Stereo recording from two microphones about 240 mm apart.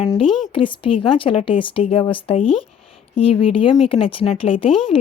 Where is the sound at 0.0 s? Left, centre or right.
Left.